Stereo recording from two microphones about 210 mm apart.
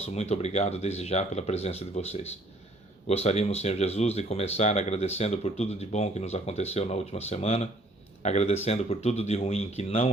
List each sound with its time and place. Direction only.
0.0 s speech: 30° left (ahead or behind)